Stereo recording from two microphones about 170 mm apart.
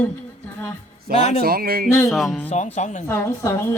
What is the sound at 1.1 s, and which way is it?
Speech, 60° right (ahead or behind).